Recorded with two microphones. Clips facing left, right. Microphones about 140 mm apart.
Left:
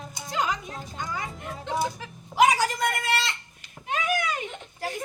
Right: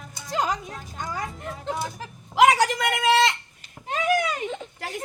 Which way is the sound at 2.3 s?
80° right.